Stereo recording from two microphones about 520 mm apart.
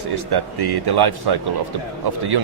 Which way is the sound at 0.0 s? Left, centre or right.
Right.